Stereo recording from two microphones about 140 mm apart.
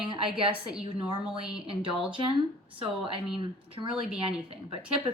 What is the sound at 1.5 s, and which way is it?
A woman's voice, 40° right (ahead or behind).